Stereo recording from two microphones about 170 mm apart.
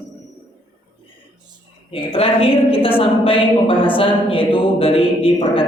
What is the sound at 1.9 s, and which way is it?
Speech, 35° left (ahead or behind).